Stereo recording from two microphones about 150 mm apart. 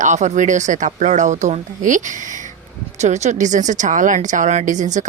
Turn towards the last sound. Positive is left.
turn(degrees=-55)  # may be behind; listen again after turning